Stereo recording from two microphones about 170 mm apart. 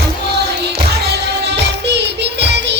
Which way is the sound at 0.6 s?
75° right (ahead or behind).